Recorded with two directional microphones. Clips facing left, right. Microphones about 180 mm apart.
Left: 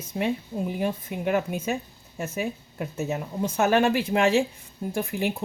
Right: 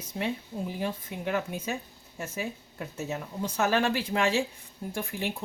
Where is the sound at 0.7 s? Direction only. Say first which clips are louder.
Left 5 dB; 50° left (ahead or behind).